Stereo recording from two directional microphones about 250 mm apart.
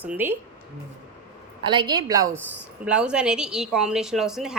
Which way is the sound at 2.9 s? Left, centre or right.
Centre.